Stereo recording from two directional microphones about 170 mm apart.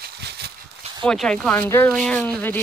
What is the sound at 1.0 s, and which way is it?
Speech, 5° left (ahead or behind).